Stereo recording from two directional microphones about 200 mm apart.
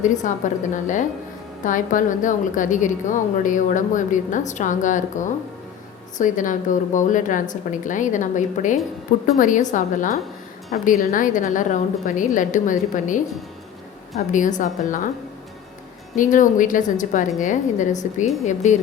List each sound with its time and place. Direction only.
0.0 s a woman's voice: 40° left (ahead or behind)
14.3 s a woman's voice: 40° left (ahead or behind)
16.1 s a woman's voice: 40° left (ahead or behind)